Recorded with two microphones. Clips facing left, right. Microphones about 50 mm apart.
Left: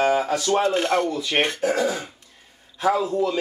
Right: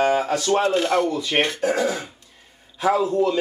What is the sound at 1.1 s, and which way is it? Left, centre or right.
Speech, centre.